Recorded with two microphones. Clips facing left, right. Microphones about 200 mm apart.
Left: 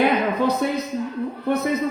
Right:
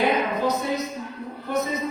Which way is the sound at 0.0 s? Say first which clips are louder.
Left 3 dB; 60° left (ahead or behind).